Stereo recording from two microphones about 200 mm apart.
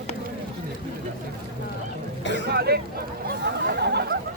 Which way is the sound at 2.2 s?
65° left (ahead or behind).